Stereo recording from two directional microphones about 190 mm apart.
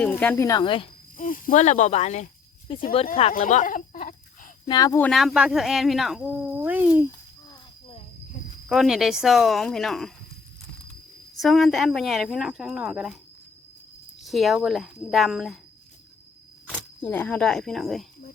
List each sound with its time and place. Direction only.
0.0 s speech: 10° left (ahead or behind); by 0.9 s 25° left (ahead or behind)
1.1 s speech: 45° left (ahead or behind); by 2.8 s 25° left (ahead or behind)
3.3 s a sound: 45° left (ahead or behind)
4.6 s speech: 20° left (ahead or behind)
4.9 s speech: 5° left (ahead or behind)
7.5 s a sound: 25° left (ahead or behind)
8.7 s speech: centre (ahead or behind)
11.3 s speech: centre (ahead or behind)
14.3 s speech: centre (ahead or behind)
16.6 s speech: 5° left (ahead or behind)